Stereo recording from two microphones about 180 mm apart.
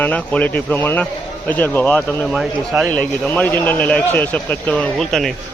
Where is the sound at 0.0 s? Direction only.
10° left (ahead or behind).